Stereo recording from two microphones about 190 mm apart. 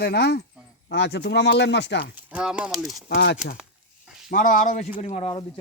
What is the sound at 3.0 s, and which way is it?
Speech, 60° left (ahead or behind).